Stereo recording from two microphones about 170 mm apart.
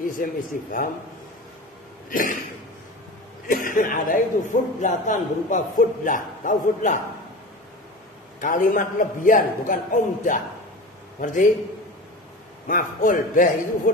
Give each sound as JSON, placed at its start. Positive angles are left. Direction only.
{"t": 0.2, "sound": "a man's voice", "side_deg": 55}
{"t": 2.0, "sound": "a sound", "side_deg": 55}
{"t": 3.4, "sound": "a man's voice", "side_deg": 55}
{"t": 8.4, "sound": "a man's voice", "side_deg": 50}
{"t": 12.6, "sound": "a man's voice", "side_deg": 55}